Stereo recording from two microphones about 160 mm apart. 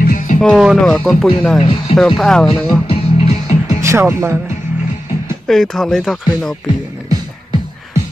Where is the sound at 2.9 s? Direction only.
40° left (ahead or behind).